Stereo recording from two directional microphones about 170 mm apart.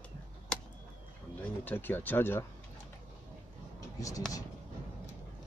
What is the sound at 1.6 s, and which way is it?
Speech, 10° left (ahead or behind).